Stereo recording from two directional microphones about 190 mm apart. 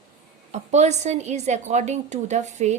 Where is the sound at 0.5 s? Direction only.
35° right (ahead or behind).